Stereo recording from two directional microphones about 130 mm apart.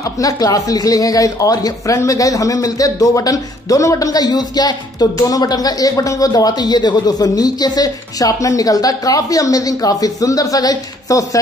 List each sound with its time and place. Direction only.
0.0 s speech: 25° left (ahead or behind)